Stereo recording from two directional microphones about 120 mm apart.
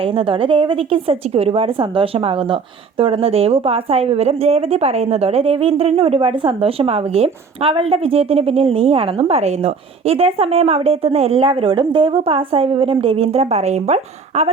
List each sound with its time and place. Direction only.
0.2 s a woman's voice: 45° right (ahead or behind); by 14.5 s 65° right (ahead or behind)